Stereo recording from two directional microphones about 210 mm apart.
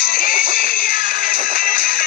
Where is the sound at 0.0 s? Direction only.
45° left (ahead or behind).